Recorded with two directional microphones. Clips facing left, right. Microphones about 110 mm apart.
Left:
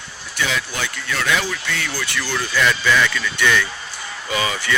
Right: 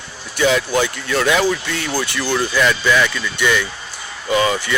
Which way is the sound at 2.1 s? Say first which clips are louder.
Right 3 dB; 15° right (ahead or behind).